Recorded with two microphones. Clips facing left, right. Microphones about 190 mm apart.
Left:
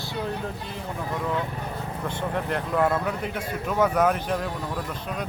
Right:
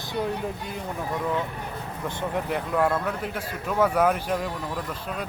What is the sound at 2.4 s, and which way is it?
Speech, 5° right (ahead or behind).